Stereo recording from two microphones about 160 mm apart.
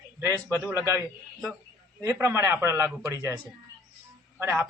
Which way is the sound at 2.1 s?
15° right (ahead or behind).